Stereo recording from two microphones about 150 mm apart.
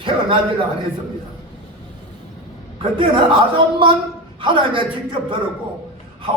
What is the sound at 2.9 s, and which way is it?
Speech, 35° right (ahead or behind).